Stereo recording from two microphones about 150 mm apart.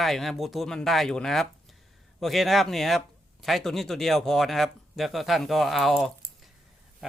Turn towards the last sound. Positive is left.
turn(degrees=0)  # may be behind; listen again after turning